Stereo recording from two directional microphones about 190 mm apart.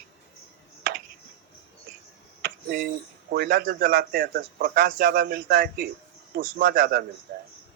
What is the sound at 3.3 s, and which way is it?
Speech, 55° right (ahead or behind).